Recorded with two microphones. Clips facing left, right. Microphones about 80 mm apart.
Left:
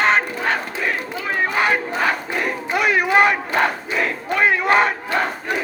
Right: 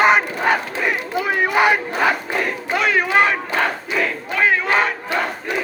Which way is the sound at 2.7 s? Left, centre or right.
Centre.